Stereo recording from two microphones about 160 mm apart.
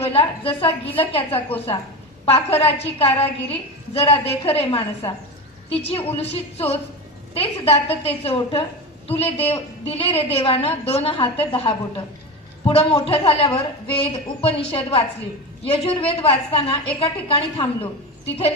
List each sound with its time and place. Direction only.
0.0 s a woman's voice: 40° left (ahead or behind)